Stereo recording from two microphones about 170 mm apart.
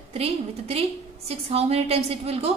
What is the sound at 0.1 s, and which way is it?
A woman's voice, 35° right (ahead or behind).